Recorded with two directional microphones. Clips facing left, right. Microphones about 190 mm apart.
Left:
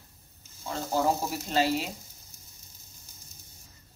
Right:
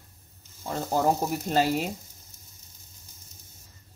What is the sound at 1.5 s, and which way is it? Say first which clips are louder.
Speech: right 1 dB; 50° right (ahead or behind).